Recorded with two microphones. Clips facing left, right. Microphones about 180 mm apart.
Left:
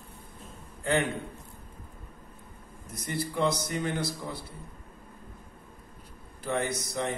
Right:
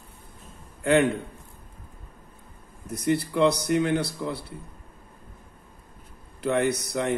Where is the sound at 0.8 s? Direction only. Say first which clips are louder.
Right 7 dB; 65° right (ahead or behind).